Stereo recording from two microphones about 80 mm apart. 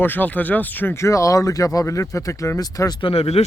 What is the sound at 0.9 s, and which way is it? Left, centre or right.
Speech, left.